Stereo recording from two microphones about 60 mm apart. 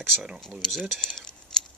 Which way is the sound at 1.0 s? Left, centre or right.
Centre.